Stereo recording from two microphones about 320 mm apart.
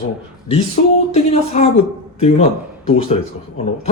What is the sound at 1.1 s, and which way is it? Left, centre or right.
Speech, centre.